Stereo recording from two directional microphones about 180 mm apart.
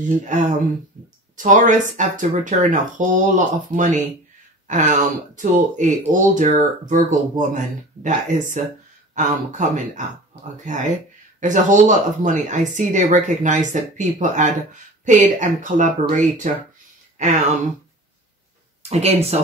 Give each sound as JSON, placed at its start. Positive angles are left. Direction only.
{"t": 0.1, "sound": "speech", "side_deg": -45}
{"t": 18.8, "sound": "speech", "side_deg": -35}